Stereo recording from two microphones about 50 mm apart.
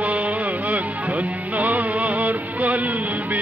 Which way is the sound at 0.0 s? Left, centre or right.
Right.